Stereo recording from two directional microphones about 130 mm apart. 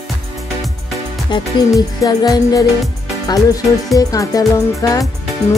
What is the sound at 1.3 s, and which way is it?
Speech, 35° left (ahead or behind).